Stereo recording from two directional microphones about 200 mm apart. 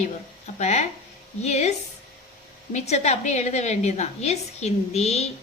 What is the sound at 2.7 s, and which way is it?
A woman's voice, 35° left (ahead or behind).